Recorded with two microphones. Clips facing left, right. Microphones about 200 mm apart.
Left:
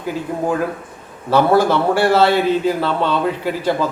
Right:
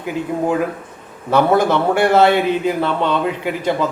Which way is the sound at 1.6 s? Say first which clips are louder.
Even; 20° right (ahead or behind).